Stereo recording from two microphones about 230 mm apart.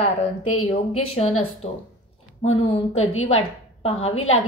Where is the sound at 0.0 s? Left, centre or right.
Left.